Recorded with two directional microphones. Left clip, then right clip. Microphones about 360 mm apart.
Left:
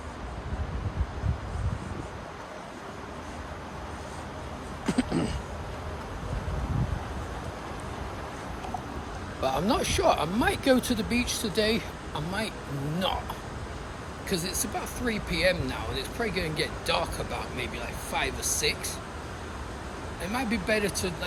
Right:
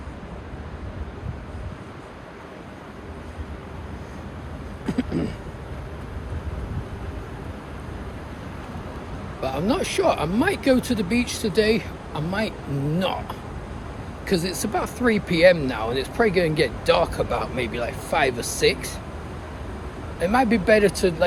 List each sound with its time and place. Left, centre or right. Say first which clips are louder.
4.9 s a sound: right 2 dB; centre
9.4 s speech: right 2 dB; centre
14.3 s speech: right 7 dB; centre
20.2 s speech: right 11 dB; centre